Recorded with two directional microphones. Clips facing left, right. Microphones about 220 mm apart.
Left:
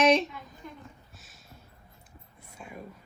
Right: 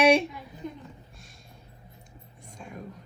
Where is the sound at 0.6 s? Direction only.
20° right (ahead or behind).